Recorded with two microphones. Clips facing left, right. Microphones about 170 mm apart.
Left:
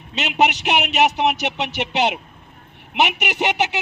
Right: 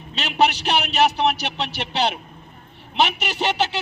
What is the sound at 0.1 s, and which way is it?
A man's voice, 20° left (ahead or behind).